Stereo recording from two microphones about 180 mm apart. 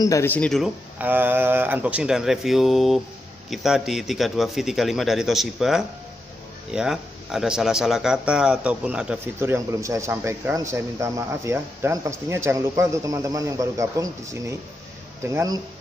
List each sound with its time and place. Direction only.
0.0 s speech: 15° left (ahead or behind)
0.9 s a man's voice: 10° right (ahead or behind)